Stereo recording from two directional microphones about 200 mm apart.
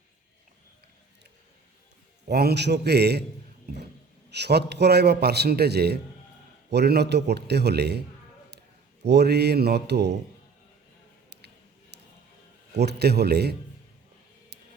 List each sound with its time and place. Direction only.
2.3 s a man's voice: 55° right (ahead or behind)
4.3 s a man's voice: 55° right (ahead or behind)
9.0 s a man's voice: 55° right (ahead or behind)
11.3 s a sound: 55° right (ahead or behind)
12.8 s a man's voice: 55° right (ahead or behind)